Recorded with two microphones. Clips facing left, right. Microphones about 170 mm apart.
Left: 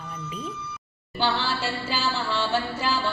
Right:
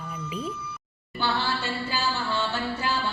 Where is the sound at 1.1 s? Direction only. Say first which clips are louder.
Left 2 dB; 90° left.